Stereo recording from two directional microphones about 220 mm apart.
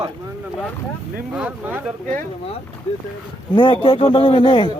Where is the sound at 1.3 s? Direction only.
5° right (ahead or behind).